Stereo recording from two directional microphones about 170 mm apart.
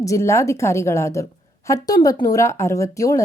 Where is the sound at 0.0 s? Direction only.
20° left (ahead or behind).